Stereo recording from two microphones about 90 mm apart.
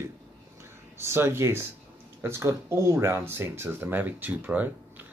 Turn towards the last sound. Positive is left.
turn(degrees=-20)  # may be behind; listen again after turning